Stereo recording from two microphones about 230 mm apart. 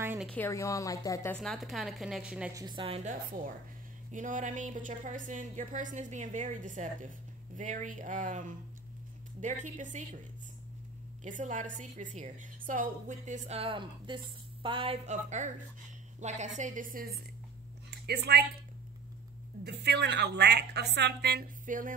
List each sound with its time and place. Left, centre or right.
0.0 s a sound: centre
0.3 s a woman's voice: centre
2.5 s a woman's voice: centre
11.2 s a woman's voice: right
19.6 s a woman's voice: right